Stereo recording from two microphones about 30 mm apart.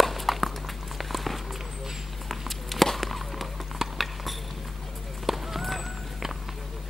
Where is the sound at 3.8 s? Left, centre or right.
Centre.